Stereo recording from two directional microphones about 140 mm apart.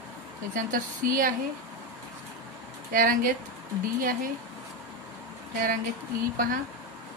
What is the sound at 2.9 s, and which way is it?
Speech, 90° right.